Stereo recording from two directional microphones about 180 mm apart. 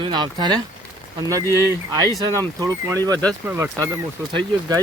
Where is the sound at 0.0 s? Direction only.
25° right (ahead or behind).